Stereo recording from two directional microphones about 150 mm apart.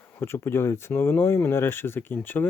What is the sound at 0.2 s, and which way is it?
Speech, 15° left (ahead or behind).